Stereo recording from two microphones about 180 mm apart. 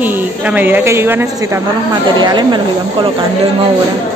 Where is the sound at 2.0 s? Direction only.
25° right (ahead or behind).